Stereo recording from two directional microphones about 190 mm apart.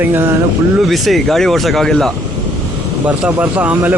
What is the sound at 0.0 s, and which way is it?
Speech, 10° right (ahead or behind).